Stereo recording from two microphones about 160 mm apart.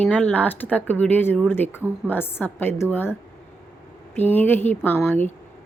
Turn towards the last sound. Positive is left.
turn(degrees=10)  # may be behind; listen again after turning